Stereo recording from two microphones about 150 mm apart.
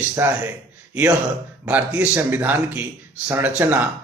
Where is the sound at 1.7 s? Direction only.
10° right (ahead or behind).